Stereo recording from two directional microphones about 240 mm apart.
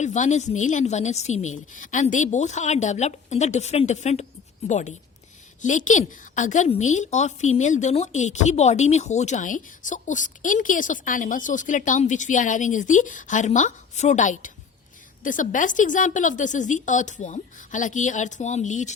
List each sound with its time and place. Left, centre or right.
0.0 s a woman's voice: left